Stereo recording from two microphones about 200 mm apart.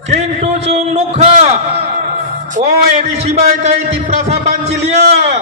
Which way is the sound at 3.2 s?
30° right (ahead or behind).